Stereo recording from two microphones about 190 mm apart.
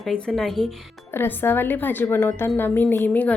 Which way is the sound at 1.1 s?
10° left (ahead or behind).